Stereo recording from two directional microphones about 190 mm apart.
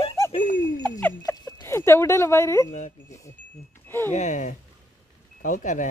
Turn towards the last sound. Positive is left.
turn(degrees=45)  # may be behind; listen again after turning